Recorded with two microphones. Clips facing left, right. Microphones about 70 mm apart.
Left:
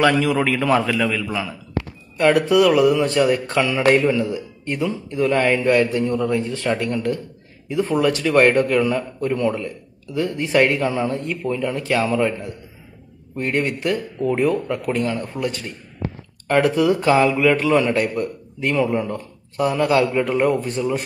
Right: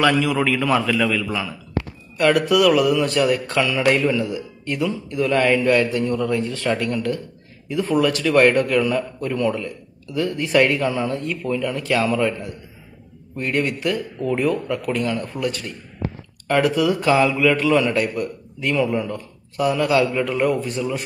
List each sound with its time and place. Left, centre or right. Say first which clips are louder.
0.0 s a man's voice: left 1 dB; left